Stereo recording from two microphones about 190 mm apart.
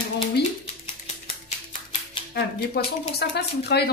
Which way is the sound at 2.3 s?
55° left (ahead or behind).